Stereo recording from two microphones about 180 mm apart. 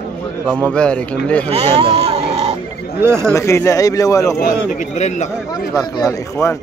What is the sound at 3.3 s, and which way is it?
Speech, 15° left (ahead or behind).